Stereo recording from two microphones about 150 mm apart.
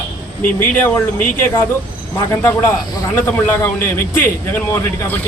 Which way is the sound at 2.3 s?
15° left (ahead or behind).